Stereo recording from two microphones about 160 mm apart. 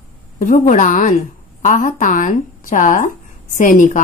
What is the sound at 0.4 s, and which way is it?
A woman's voice, 55° left (ahead or behind).